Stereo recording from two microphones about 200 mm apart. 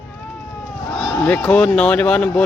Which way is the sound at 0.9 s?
5° left (ahead or behind).